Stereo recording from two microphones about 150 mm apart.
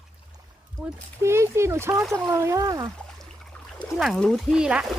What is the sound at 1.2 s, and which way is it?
Speech, 20° right (ahead or behind).